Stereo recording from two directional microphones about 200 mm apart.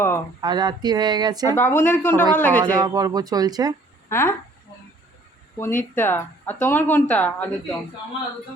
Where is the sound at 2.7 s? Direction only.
20° right (ahead or behind).